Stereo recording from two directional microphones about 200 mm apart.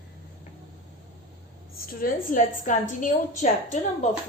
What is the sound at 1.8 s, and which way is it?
A woman's voice, 45° left (ahead or behind).